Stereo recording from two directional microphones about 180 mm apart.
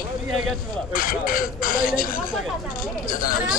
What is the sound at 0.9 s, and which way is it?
Speech, 50° left (ahead or behind).